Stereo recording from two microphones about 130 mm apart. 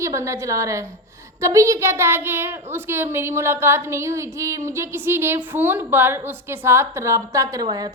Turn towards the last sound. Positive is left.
turn(degrees=-35)  # may be behind; listen again after turning